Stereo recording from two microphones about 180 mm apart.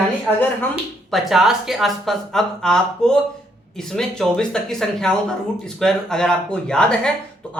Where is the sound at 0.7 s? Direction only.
Centre (ahead or behind).